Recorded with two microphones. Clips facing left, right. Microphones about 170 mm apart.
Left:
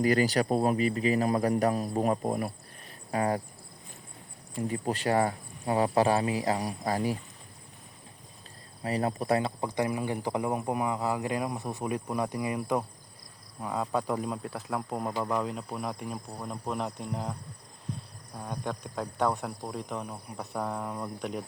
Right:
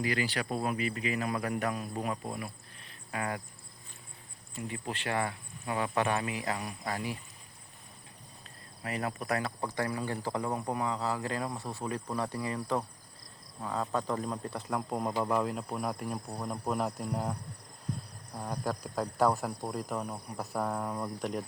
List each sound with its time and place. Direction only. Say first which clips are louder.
0.0 s speech: left 8 dB; 45° left (ahead or behind)
4.7 s speech: left 7 dB; 40° left (ahead or behind)
8.8 s speech: left 6 dB; 30° left (ahead or behind)
9.6 s speech: left 4 dB; 15° left (ahead or behind); by 17.3 s 5° right (ahead or behind)
18.3 s speech: right 1 dB; 10° right (ahead or behind)